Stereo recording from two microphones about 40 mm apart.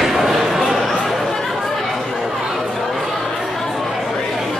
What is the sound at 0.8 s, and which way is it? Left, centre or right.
Chatter, centre.